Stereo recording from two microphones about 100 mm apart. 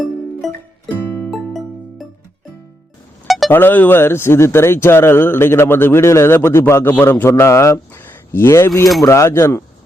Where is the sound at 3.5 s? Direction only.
20° left (ahead or behind).